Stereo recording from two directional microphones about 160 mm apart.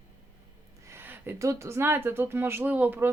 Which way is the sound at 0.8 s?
15° right (ahead or behind).